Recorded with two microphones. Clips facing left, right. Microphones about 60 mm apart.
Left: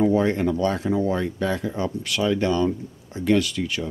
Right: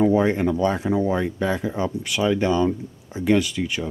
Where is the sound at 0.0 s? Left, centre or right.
Centre.